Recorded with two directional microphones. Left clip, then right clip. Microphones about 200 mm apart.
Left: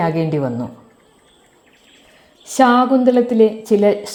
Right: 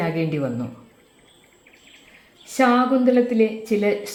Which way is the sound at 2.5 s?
30° left (ahead or behind).